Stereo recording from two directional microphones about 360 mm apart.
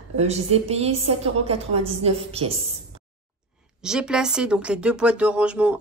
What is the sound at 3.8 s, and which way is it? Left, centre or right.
Speech, centre.